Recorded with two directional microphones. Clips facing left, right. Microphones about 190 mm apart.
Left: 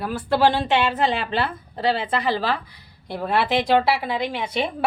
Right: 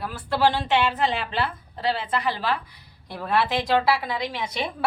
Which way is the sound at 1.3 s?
65° left (ahead or behind).